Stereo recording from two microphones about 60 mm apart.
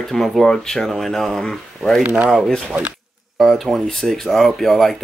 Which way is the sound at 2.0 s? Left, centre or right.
Right.